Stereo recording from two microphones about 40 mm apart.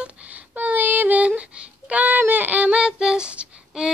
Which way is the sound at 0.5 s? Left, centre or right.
Right.